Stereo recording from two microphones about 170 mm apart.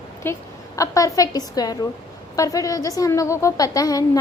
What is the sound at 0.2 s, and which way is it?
A woman's voice, 15° left (ahead or behind).